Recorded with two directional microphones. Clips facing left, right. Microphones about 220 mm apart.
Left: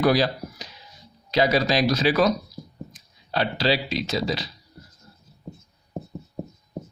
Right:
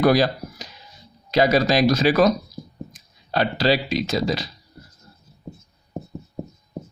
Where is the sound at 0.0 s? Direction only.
50° right (ahead or behind).